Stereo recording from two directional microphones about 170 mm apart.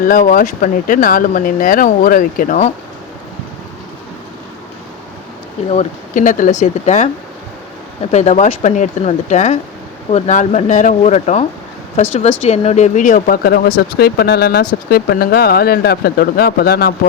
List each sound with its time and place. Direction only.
0.0 s speech: 50° left (ahead or behind)
5.6 s speech: 45° left (ahead or behind)
8.1 s speech: 45° left (ahead or behind)
12.5 s speech: 40° left (ahead or behind); by 16.9 s 65° left (ahead or behind)